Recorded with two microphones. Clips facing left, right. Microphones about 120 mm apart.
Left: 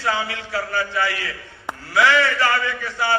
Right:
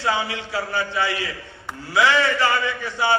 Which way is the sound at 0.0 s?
20° right (ahead or behind).